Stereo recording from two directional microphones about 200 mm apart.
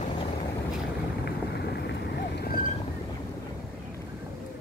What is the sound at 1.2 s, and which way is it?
Boat, 55° left (ahead or behind).